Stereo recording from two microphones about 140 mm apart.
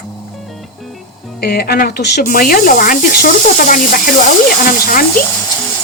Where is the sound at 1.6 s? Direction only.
90° left.